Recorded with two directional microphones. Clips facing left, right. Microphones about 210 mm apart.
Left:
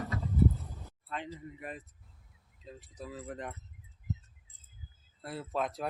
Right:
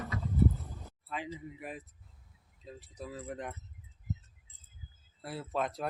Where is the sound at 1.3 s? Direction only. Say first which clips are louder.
Even; 5° right (ahead or behind).